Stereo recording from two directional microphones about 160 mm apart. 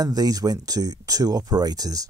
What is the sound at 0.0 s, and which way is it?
Speech, 25° right (ahead or behind).